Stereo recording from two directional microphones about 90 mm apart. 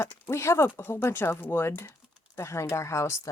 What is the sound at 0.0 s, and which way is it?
Speech, 30° left (ahead or behind).